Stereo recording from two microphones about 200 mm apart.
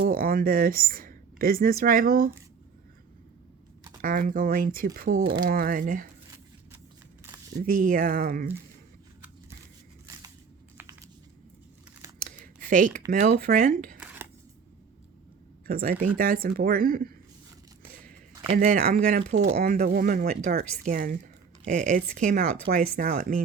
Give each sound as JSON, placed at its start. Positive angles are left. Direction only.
{"t": 0.1, "sound": "speech", "side_deg": -45}
{"t": 4.0, "sound": "speech", "side_deg": -45}
{"t": 5.2, "sound": "speech", "side_deg": -25}
{"t": 5.5, "sound": "speech", "side_deg": -45}
{"t": 7.5, "sound": "speech", "side_deg": -45}
{"t": 10.8, "sound": "a sound", "side_deg": -15}
{"t": 12.4, "sound": "a sound", "side_deg": -40}
{"t": 13.1, "sound": "speech", "side_deg": -45}
{"t": 14.0, "sound": "a sound", "side_deg": -5}
{"t": 15.6, "sound": "speech", "side_deg": -45}
{"t": 18.5, "sound": "speech", "side_deg": -45}